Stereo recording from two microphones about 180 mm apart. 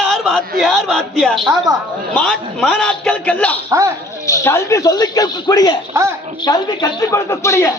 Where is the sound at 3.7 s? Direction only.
20° right (ahead or behind).